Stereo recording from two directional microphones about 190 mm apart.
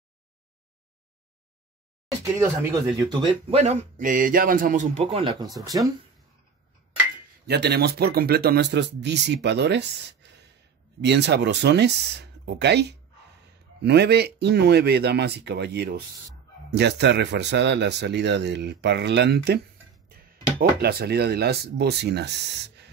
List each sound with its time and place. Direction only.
2.3 s speech: 10° right (ahead or behind)
3.0 s speech: 25° right (ahead or behind)
7.4 s speech: 60° right (ahead or behind)